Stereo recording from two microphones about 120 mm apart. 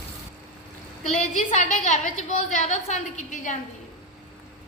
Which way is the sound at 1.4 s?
90° left.